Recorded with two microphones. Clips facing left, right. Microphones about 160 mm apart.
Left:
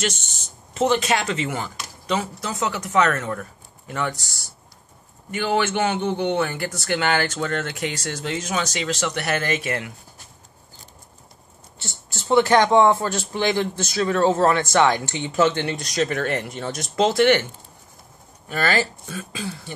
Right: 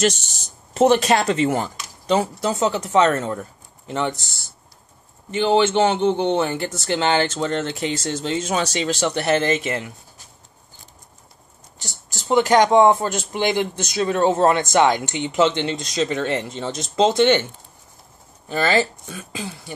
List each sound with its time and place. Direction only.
0.0 s speech: 40° right (ahead or behind); by 9.8 s 25° right (ahead or behind)
11.8 s a sound: 40° right (ahead or behind)
12.3 s speech: 15° right (ahead or behind)
18.5 s speech: 20° right (ahead or behind)